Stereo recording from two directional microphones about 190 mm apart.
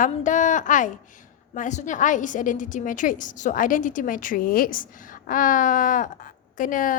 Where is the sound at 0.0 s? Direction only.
40° left (ahead or behind).